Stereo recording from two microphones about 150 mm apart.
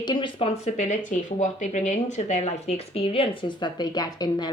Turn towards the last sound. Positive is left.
turn(degrees=25)  # may be behind; listen again after turning